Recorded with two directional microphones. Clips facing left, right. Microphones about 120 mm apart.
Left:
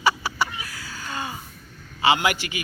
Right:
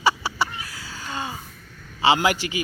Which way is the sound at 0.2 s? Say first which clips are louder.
Even; 30° right (ahead or behind).